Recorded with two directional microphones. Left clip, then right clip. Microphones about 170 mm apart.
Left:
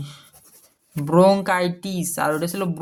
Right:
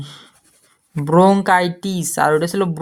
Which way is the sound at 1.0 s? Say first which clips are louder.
Right 3 dB; 40° right (ahead or behind).